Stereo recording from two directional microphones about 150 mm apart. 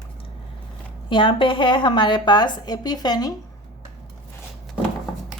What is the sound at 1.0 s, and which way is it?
A woman's voice, 35° left (ahead or behind).